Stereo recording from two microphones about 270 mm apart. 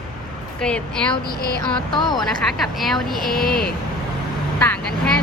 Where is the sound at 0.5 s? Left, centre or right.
Centre.